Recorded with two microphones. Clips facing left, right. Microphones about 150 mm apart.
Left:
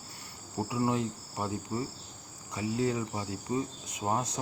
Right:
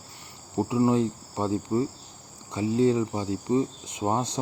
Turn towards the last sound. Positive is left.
turn(degrees=-30)  # may be behind; listen again after turning